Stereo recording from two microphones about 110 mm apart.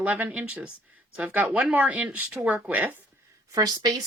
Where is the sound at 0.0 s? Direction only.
15° right (ahead or behind).